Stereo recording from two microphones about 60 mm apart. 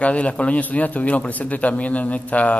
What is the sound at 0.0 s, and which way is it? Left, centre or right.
A man's voice, left.